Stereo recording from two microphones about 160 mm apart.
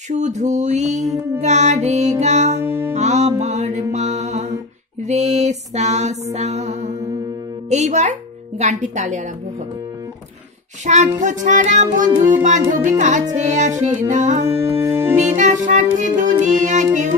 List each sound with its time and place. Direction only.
0.1 s music: 45° right (ahead or behind)
3.9 s mantra: 45° right (ahead or behind)
5.0 s music: 45° right (ahead or behind)
7.7 s speech: 45° right (ahead or behind)
11.1 s music: 50° right (ahead or behind)
14.8 s music: 15° right (ahead or behind)
15.1 s music: 50° right (ahead or behind)